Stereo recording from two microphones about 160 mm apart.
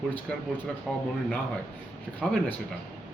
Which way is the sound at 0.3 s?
5° left (ahead or behind).